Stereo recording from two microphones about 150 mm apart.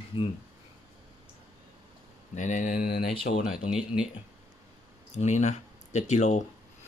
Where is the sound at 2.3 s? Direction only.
55° left (ahead or behind); by 3.1 s 80° left.